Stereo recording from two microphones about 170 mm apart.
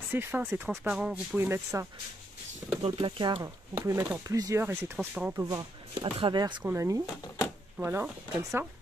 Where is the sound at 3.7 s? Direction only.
15° right (ahead or behind).